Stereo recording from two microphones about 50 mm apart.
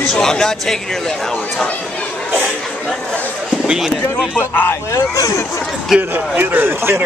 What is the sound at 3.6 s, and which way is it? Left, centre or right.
Speech, centre.